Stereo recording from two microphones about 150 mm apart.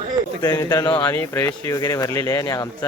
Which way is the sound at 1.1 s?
15° left (ahead or behind).